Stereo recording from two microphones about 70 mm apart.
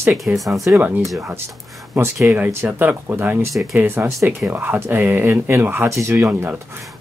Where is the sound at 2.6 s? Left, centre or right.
Right.